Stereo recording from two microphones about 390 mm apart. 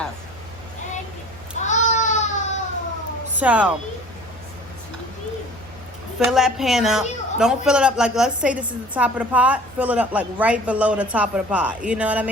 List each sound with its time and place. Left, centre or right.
1.5 s baby cry: centre
3.3 s a man's voice: centre
6.1 s a man's voice: centre